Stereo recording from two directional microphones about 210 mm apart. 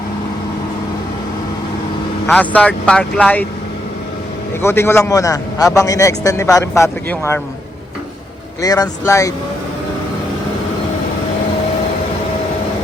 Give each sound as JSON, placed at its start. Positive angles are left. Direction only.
{"t": 2.2, "sound": "a man's voice", "side_deg": 5}
{"t": 4.6, "sound": "a man's voice", "side_deg": 10}
{"t": 8.6, "sound": "a man's voice", "side_deg": 15}